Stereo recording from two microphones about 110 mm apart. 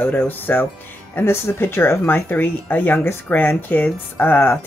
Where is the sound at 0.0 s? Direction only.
20° left (ahead or behind).